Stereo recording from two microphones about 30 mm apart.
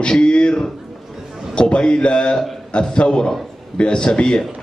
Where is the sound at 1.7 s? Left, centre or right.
Left.